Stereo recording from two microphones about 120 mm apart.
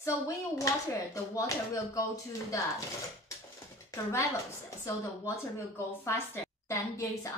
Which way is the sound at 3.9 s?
25° left (ahead or behind).